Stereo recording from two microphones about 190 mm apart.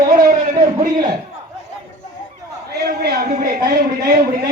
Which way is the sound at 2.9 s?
55° right (ahead or behind).